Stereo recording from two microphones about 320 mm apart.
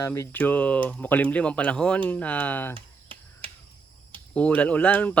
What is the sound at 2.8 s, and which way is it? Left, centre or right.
Finger snapping, centre.